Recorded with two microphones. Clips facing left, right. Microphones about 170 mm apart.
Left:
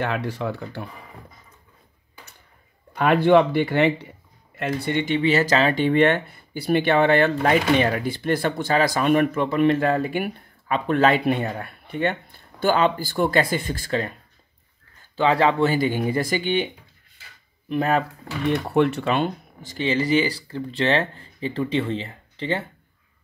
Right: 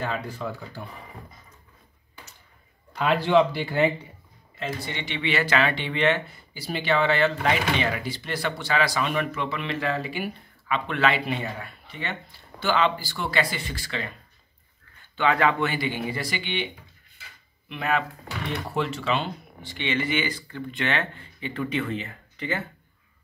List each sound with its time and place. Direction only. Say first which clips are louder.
0.0 s speech: left 5 dB; 75° left (ahead or behind)
2.9 s speech: left 5 dB; 55° left (ahead or behind); by 4.1 s 70° left (ahead or behind)
4.6 s speech: left 8 dB; 60° left (ahead or behind); by 14.1 s 45° left (ahead or behind)
15.0 s speech: left 4 dB; 35° left (ahead or behind)
18.7 s speech: left 5 dB; 60° left (ahead or behind); by 22.7 s 30° left (ahead or behind)